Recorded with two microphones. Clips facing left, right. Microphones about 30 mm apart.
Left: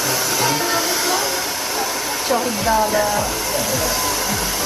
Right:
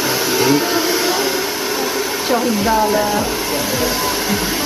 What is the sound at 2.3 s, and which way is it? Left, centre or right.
Speech, centre.